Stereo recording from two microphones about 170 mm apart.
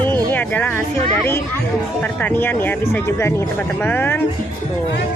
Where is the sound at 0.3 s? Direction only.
10° left (ahead or behind).